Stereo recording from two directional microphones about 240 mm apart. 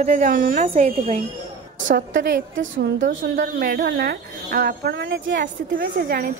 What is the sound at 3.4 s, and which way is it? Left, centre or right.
Speech, right.